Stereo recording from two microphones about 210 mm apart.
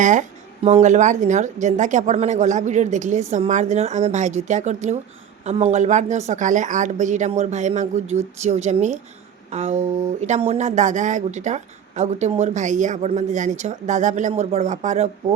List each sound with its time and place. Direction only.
0.0 s speech: 35° right (ahead or behind)